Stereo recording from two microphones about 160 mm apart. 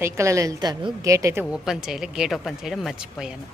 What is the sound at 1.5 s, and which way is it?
Speech, 5° right (ahead or behind).